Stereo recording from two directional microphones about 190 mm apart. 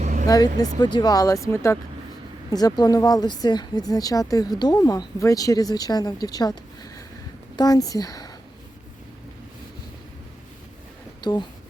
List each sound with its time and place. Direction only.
0.0 s vehicle: 40° right (ahead or behind)
0.3 s speech: 20° left (ahead or behind)
11.2 s speech: 20° left (ahead or behind)